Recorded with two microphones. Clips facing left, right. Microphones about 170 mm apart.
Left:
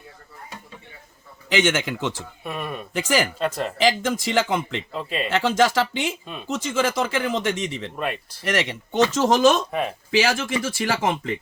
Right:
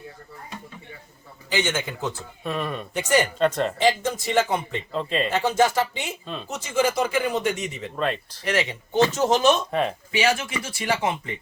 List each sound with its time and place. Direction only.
1.5 s speech: 90° left
2.4 s speech: 10° left (ahead or behind)
2.9 s speech: 90° left
3.3 s speech: 5° left (ahead or behind)
3.8 s speech: 90° left
4.9 s speech: 10° left (ahead or behind)
5.3 s speech: 90° left
7.9 s speech: 10° left (ahead or behind)
8.5 s speech: 85° left